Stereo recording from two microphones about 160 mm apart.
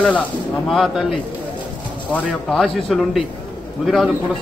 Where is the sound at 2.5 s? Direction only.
5° left (ahead or behind).